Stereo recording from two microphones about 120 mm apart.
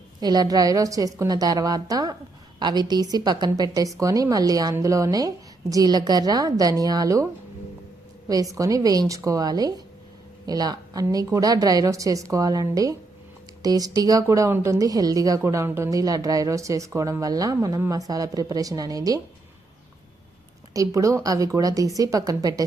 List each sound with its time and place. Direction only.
0.2 s a woman's voice: 35° right (ahead or behind)
8.3 s a woman's voice: 30° right (ahead or behind)
20.7 s speech: 25° right (ahead or behind)